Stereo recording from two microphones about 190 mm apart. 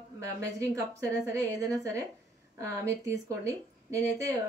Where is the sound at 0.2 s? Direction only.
15° right (ahead or behind).